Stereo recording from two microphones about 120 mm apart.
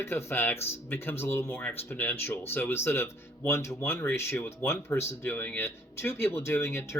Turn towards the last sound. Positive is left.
turn(degrees=20)  # may be behind; listen again after turning